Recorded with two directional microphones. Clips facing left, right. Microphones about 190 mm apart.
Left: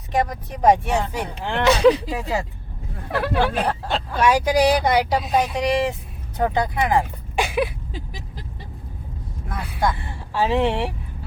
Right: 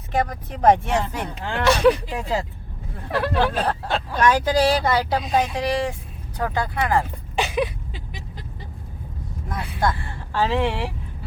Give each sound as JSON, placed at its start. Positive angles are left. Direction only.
{"t": 0.1, "sound": "speech", "side_deg": 20}
{"t": 5.2, "sound": "speech", "side_deg": 5}
{"t": 6.3, "sound": "speech", "side_deg": 20}
{"t": 9.5, "sound": "vehicle", "side_deg": 0}
{"t": 9.8, "sound": "a woman's voice", "side_deg": 15}